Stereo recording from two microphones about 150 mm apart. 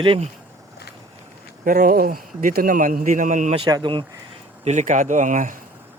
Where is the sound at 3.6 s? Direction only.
30° right (ahead or behind).